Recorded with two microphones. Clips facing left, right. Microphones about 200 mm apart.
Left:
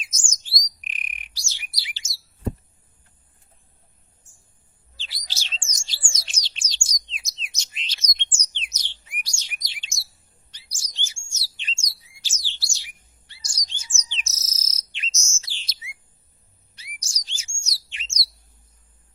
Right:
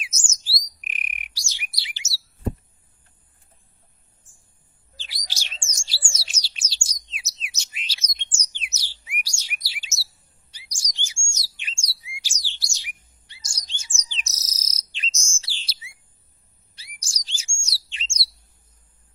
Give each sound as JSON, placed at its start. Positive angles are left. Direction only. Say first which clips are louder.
{"t": 0.0, "sound": "bird", "louder": "right 2 dB", "side_deg": -5}
{"t": 2.0, "sound": "chirp", "louder": "right 4 dB", "side_deg": -10}
{"t": 4.9, "sound": "chirp", "louder": "even", "side_deg": -15}
{"t": 6.1, "sound": "bird", "louder": "even", "side_deg": -5}
{"t": 9.2, "sound": "chirp", "louder": "right 2 dB", "side_deg": -10}
{"t": 16.7, "sound": "chirp", "louder": "left 1 dB", "side_deg": -30}